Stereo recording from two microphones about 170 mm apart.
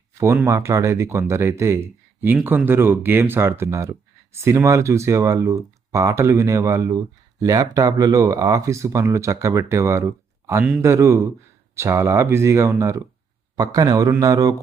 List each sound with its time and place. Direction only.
0.4 s a man's voice: 15° right (ahead or behind)